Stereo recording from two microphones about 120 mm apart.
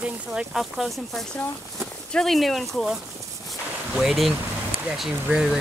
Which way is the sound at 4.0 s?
Centre (ahead or behind).